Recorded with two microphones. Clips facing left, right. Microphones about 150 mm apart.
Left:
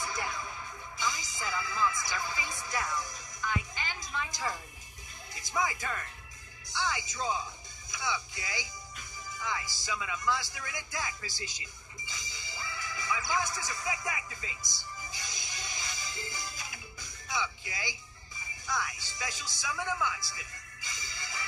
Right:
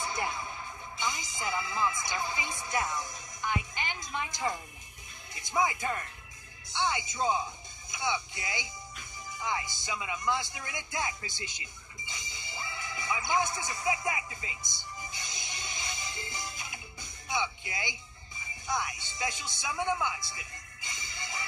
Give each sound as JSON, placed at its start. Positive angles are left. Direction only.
{"t": 0.0, "sound": "music", "side_deg": -25}
{"t": 5.3, "sound": "speech", "side_deg": -25}
{"t": 9.4, "sound": "music", "side_deg": -20}
{"t": 18.7, "sound": "speech", "side_deg": -25}